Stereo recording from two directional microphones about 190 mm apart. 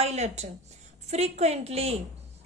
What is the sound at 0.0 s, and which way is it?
A woman's voice, 35° right (ahead or behind).